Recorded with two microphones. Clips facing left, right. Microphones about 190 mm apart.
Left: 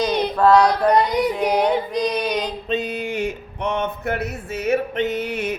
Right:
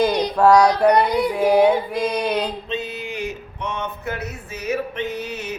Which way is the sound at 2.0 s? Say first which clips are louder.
Right 1 dB; 10° right (ahead or behind).